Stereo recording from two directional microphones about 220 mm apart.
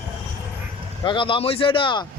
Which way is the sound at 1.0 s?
20° left (ahead or behind).